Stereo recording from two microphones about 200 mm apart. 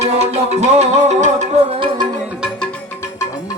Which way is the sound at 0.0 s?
30° right (ahead or behind).